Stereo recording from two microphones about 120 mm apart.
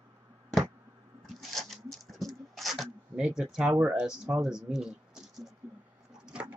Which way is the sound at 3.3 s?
5° right (ahead or behind).